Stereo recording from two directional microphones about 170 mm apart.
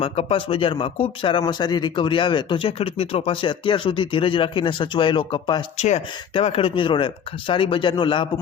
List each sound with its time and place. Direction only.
0.0 s speech: 35° left (ahead or behind)
5.7 s speech: 40° left (ahead or behind)